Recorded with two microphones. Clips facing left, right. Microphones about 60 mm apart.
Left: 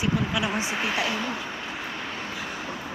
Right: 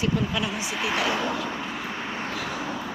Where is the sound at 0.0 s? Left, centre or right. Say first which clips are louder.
Even; centre.